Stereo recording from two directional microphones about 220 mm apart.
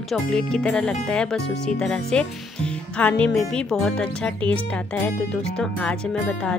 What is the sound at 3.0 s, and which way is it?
Music, 5° left (ahead or behind).